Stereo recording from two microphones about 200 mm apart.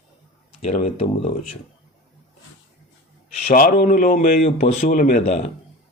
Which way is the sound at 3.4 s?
45° left (ahead or behind).